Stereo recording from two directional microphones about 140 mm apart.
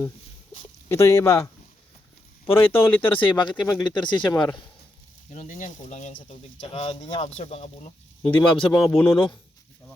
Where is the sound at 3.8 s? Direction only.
35° left (ahead or behind).